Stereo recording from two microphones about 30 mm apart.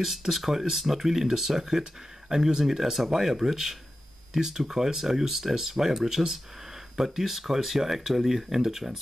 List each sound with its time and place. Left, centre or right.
0.0 s speech: centre